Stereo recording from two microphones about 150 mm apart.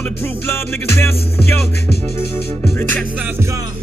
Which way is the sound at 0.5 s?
15° left (ahead or behind).